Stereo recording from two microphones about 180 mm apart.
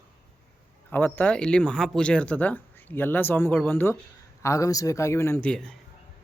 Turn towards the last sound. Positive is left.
turn(degrees=10)  # may be behind; listen again after turning